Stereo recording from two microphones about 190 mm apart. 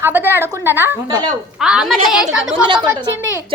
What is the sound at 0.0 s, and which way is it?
A woman's voice, 10° right (ahead or behind).